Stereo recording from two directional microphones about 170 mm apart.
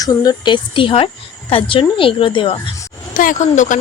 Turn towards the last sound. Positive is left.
turn(degrees=45)  # may be behind; listen again after turning